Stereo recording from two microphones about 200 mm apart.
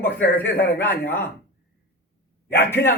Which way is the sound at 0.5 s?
10° left (ahead or behind).